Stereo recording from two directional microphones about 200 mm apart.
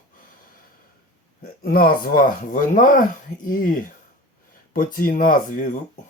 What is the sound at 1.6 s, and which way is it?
Speech, 50° left (ahead or behind).